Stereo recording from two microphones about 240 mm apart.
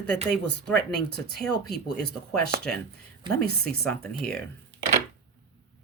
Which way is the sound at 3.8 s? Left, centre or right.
Centre.